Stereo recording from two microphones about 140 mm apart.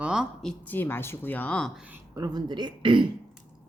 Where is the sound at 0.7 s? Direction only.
15° left (ahead or behind).